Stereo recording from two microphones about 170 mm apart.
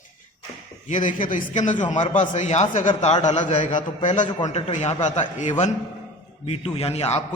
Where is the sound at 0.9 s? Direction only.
50° left (ahead or behind).